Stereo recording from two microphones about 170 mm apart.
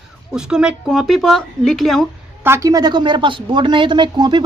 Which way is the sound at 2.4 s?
15° right (ahead or behind).